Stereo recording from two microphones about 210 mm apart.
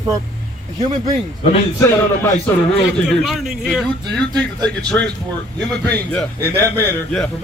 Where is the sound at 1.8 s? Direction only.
15° left (ahead or behind).